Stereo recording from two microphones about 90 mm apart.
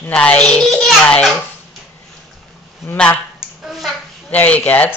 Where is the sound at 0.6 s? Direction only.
5° left (ahead or behind).